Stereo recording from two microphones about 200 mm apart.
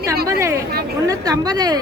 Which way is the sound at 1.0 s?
15° right (ahead or behind).